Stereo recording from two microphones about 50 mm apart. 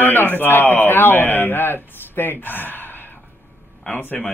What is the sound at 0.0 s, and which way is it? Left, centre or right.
Speech, left.